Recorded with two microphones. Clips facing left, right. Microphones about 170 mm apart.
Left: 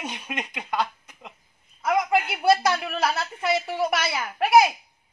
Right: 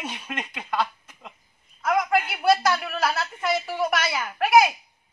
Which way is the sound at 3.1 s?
Centre (ahead or behind).